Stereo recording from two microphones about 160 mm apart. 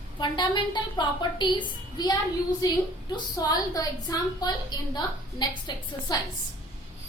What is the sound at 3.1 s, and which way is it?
A woman's voice, 25° left (ahead or behind).